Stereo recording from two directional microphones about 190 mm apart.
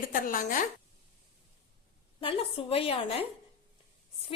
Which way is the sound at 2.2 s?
30° left (ahead or behind).